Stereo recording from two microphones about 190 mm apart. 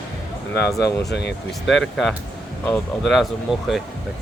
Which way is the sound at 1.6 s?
Centre (ahead or behind).